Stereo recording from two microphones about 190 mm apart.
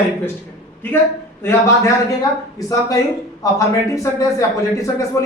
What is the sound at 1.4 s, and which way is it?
Speech, 15° left (ahead or behind).